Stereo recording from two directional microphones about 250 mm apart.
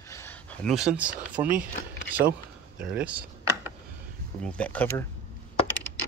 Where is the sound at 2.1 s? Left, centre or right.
Right.